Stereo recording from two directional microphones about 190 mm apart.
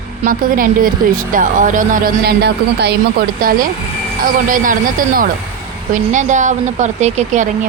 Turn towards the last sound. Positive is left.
turn(degrees=-40)  # may be behind; listen again after turning